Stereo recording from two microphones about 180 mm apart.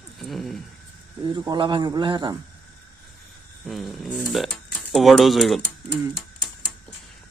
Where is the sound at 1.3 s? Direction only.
25° right (ahead or behind).